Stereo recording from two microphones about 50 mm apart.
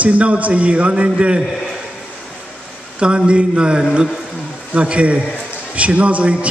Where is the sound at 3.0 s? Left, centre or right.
Centre.